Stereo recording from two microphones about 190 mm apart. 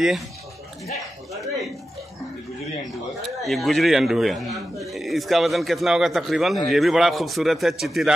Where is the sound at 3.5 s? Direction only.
Centre (ahead or behind).